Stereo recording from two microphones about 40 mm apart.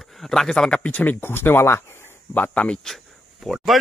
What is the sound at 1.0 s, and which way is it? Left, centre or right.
Speech, left.